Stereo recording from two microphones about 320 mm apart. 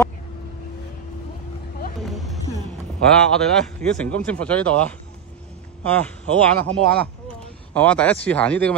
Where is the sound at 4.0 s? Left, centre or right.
Centre.